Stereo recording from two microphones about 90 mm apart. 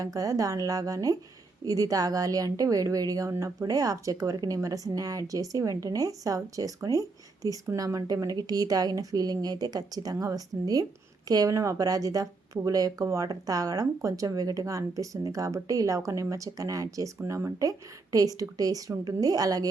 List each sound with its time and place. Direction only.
0.0 s a woman's voice: 40° right (ahead or behind)